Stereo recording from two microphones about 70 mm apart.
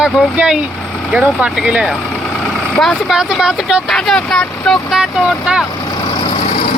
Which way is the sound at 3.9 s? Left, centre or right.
Centre.